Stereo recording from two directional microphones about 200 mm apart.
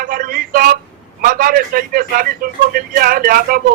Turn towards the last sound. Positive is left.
turn(degrees=-45)  # may be behind; listen again after turning